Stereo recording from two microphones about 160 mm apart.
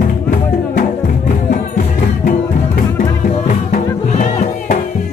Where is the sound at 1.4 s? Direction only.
55° left (ahead or behind).